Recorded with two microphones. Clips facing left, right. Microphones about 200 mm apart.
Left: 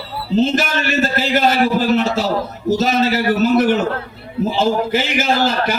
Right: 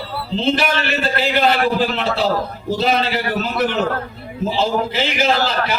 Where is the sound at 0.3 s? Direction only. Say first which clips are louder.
Left 2 dB; 45° left (ahead or behind).